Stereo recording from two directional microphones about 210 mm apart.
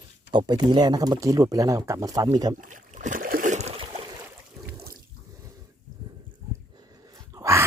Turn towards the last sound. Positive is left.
turn(degrees=-15)  # may be behind; listen again after turning